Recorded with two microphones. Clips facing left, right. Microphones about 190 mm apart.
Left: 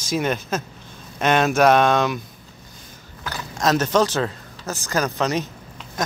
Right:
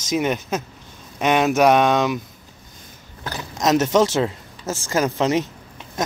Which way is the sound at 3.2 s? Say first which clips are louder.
Right 1 dB; 20° right (ahead or behind).